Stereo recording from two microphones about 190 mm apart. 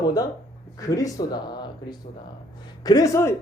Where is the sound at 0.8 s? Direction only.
15° left (ahead or behind).